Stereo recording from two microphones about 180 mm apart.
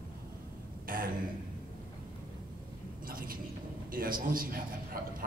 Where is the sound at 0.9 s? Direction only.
50° right (ahead or behind).